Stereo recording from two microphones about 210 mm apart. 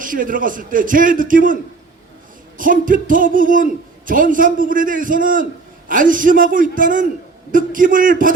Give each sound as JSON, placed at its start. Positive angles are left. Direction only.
{"t": 0.0, "sound": "speech", "side_deg": -40}
{"t": 2.6, "sound": "speech", "side_deg": -40}